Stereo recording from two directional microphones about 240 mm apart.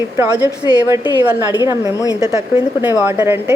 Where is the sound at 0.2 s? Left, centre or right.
Centre.